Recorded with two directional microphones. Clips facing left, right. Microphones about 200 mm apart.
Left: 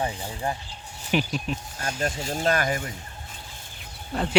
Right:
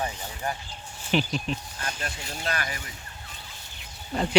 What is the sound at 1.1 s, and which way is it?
Speech, 5° left (ahead or behind).